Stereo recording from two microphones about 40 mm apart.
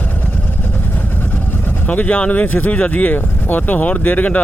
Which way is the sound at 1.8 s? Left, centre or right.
Left.